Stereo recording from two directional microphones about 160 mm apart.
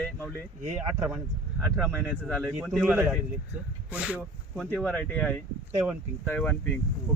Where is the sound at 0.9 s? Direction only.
10° right (ahead or behind).